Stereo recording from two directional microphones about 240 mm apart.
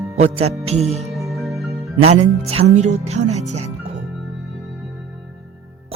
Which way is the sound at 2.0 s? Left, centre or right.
Right.